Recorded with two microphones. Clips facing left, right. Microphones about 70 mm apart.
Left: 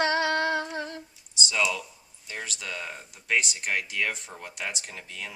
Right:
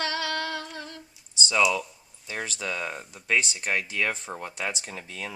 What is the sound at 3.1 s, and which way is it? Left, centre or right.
Speech, right.